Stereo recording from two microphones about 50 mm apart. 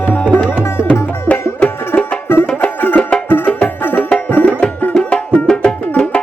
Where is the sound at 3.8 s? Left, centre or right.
Left.